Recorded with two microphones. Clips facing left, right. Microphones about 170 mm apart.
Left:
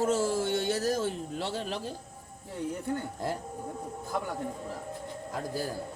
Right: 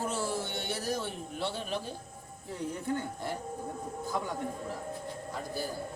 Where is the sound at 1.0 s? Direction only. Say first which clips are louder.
Left 3 dB; 90° left.